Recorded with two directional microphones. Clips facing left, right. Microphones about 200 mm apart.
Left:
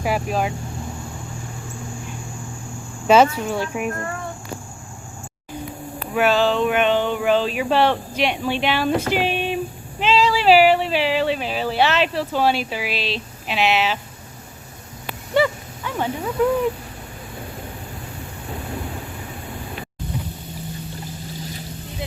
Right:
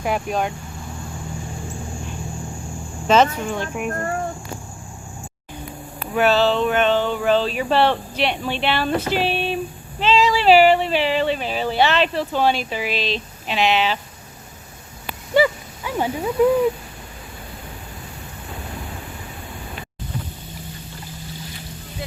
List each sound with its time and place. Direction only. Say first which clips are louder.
0.0 s speech: even; 5° left (ahead or behind)
3.1 s speech: left 2 dB; 10° left (ahead or behind)
3.8 s a child's voice: right 1 dB; 40° right (ahead or behind)
6.1 s speech: right 1 dB; 10° left (ahead or behind)
10.2 s speech: right 1 dB; centre (ahead or behind)
15.4 s speech: right 2 dB; centre (ahead or behind)
15.8 s speech: right 2 dB; 10° right (ahead or behind)